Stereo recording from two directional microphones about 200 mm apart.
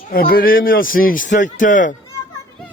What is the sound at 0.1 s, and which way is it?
A man's voice, 50° left (ahead or behind).